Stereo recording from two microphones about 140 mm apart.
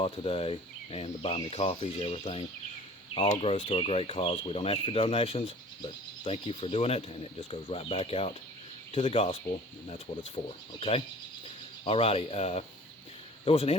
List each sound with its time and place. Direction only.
0.0 s speech: 40° left (ahead or behind)